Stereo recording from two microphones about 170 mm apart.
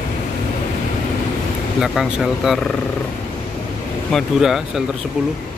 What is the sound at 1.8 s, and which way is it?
Speech, centre (ahead or behind).